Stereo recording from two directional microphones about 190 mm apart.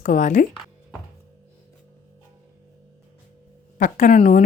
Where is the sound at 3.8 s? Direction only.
40° left (ahead or behind).